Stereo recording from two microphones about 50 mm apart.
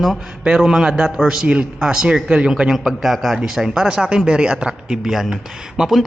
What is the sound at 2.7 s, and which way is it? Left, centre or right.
A man's voice, centre.